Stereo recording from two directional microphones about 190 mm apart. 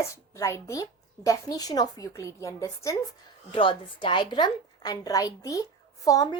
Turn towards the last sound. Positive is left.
turn(degrees=20)  # may be behind; listen again after turning